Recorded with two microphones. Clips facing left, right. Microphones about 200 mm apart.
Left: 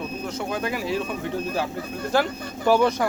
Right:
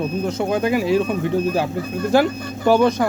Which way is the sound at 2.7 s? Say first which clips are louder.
Right 4 dB; 5° left (ahead or behind).